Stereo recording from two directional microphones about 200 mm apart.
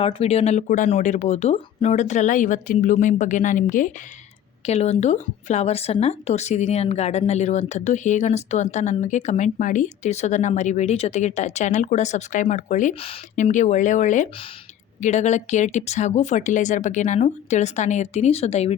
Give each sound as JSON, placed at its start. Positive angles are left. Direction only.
{"t": 0.0, "sound": "speech", "side_deg": 30}